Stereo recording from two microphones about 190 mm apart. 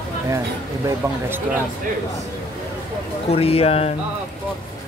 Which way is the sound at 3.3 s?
30° left (ahead or behind).